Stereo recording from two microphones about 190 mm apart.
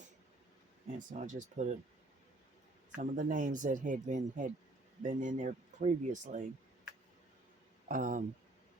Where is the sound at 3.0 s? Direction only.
45° right (ahead or behind).